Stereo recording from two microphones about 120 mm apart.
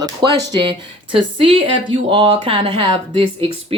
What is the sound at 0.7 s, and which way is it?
Speech, 45° right (ahead or behind).